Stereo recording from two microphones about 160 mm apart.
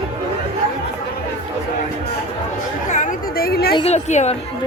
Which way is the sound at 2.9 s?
50° left (ahead or behind).